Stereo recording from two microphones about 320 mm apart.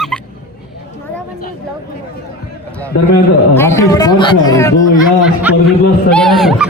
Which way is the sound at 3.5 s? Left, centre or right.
Centre.